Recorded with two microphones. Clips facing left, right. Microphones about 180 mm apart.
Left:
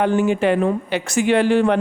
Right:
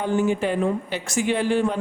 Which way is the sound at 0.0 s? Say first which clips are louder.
Left 5 dB; 70° left (ahead or behind).